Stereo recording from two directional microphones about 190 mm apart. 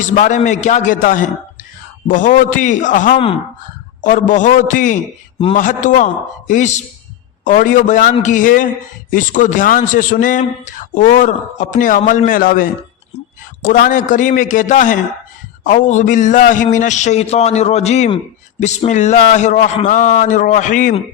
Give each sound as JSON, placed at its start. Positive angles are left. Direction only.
{"t": 0.0, "sound": "a man's voice", "side_deg": 40}